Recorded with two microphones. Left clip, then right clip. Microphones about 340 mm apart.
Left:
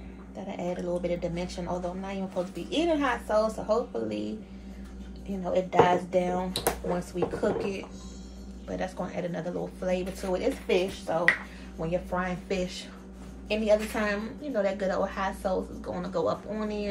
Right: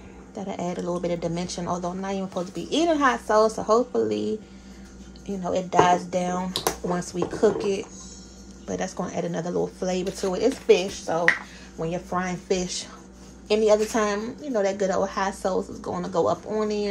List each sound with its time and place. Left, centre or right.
0.5 s speech: right
5.4 s speech: right